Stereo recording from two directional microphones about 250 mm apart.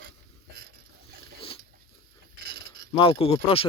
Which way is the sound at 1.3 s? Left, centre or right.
Left.